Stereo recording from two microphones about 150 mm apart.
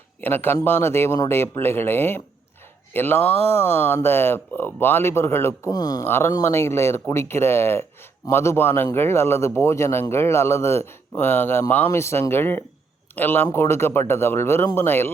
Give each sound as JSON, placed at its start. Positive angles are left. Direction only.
{"t": 0.2, "sound": "speech", "side_deg": 15}